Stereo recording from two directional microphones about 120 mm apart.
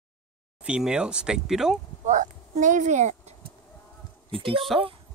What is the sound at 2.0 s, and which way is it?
Speech, 90° right.